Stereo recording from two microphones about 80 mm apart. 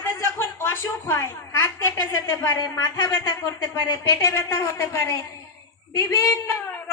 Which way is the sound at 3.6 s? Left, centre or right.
Left.